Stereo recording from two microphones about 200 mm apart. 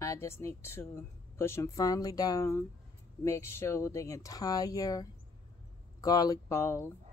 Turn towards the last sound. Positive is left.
turn(degrees=15)  # may be behind; listen again after turning